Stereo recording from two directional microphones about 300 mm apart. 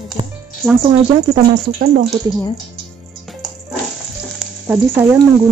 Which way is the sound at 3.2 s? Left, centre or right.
Centre.